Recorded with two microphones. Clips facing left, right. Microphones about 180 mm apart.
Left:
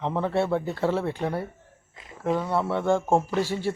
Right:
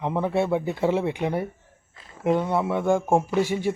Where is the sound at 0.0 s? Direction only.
15° right (ahead or behind).